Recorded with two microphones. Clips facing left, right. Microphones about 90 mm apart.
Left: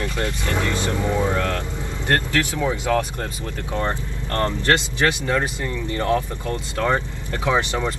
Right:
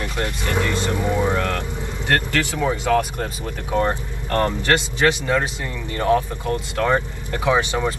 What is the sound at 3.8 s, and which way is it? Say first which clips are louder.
Speech: right 3 dB; 15° right (ahead or behind).